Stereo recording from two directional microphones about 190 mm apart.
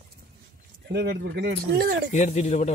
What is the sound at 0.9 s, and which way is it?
Speech, 60° right (ahead or behind).